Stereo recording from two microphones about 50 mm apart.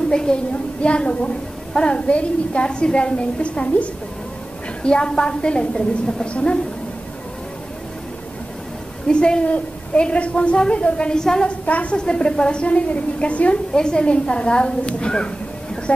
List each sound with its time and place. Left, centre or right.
0.1 s a woman's voice: centre
9.0 s a woman's voice: centre
11.6 s a woman's voice: left